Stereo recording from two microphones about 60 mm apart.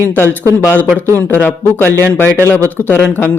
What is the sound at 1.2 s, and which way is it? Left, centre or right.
Speech, left.